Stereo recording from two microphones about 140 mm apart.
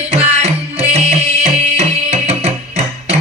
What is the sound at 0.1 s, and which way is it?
Music, 50° right (ahead or behind).